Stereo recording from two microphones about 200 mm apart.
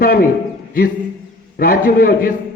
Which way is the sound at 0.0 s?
45° left (ahead or behind).